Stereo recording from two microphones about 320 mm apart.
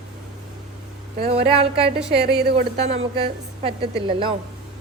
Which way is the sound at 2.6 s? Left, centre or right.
Right.